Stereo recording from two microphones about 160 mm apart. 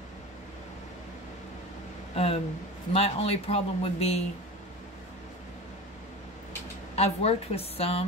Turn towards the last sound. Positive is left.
turn(degrees=40)  # may be behind; listen again after turning